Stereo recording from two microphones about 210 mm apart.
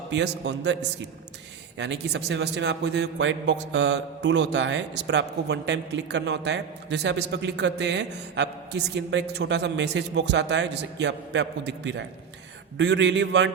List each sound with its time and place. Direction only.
0.1 s a man's voice: 55° right (ahead or behind)